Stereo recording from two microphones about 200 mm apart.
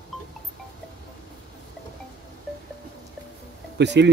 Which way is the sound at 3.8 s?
60° right (ahead or behind).